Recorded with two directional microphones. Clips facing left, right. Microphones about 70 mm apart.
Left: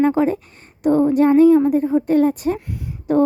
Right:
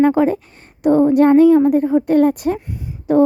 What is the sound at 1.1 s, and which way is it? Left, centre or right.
A woman's voice, right.